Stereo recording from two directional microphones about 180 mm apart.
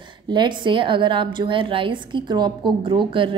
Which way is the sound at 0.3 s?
25° right (ahead or behind).